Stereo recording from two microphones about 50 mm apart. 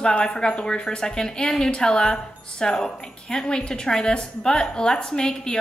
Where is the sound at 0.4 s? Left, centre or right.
Centre.